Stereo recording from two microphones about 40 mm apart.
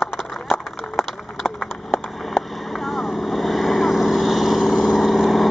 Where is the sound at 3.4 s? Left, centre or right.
Centre.